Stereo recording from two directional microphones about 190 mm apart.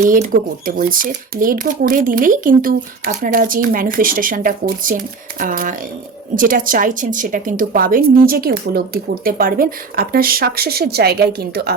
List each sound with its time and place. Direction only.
0.0 s speech: 45° right (ahead or behind)